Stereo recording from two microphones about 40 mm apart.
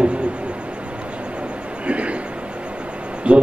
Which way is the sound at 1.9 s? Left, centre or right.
Right.